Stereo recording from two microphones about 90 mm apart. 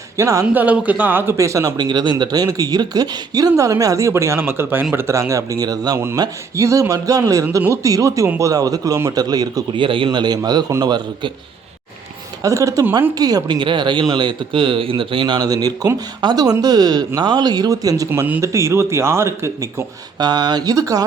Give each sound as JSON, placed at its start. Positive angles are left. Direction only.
{"t": 0.2, "sound": "speech", "side_deg": -35}
{"t": 0.4, "sound": "speech", "side_deg": -15}
{"t": 1.8, "sound": "speech", "side_deg": -55}
{"t": 6.6, "sound": "speech", "side_deg": -35}
{"t": 9.8, "sound": "speech", "side_deg": -70}
{"t": 12.4, "sound": "speech", "side_deg": -35}
{"t": 15.4, "sound": "speech", "side_deg": -45}
{"t": 20.1, "sound": "speech", "side_deg": -50}